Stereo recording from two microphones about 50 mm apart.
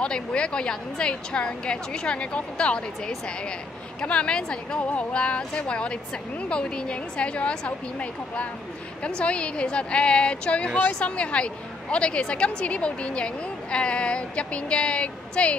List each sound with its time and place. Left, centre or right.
0.0 s a woman's voice: centre
4.0 s a woman's voice: left
4.7 s a woman's voice: left